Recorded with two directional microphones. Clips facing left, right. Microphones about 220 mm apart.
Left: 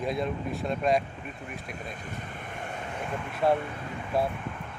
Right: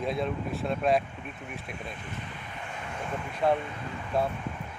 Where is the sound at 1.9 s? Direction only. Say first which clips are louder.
Left 1 dB; 45° left (ahead or behind).